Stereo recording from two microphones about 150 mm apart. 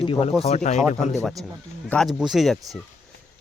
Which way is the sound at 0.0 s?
35° left (ahead or behind).